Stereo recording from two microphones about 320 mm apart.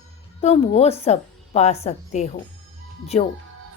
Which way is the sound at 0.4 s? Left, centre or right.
Centre.